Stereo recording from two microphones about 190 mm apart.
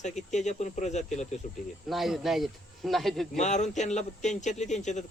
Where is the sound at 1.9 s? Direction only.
Centre (ahead or behind).